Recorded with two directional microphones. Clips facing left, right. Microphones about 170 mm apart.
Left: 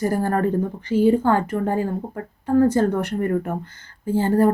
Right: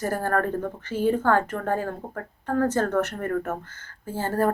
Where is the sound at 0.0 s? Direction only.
15° left (ahead or behind).